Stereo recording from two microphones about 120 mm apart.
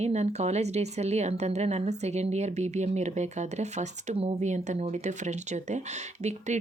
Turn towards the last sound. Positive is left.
turn(degrees=-75)  # may be behind; listen again after turning